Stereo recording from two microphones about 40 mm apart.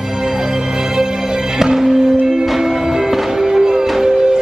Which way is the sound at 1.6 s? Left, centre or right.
Centre.